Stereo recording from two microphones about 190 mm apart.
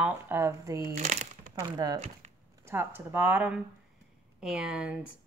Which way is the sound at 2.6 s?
10° right (ahead or behind).